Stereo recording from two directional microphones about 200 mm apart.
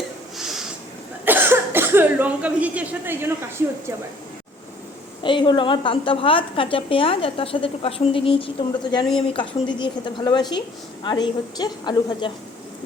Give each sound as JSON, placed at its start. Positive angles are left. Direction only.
{"t": 0.3, "sound": "snort", "side_deg": 0}
{"t": 1.2, "sound": "cough", "side_deg": -10}
{"t": 5.2, "sound": "a woman's voice", "side_deg": 25}